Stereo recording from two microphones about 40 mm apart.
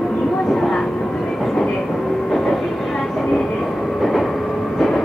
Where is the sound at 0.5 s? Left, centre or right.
Centre.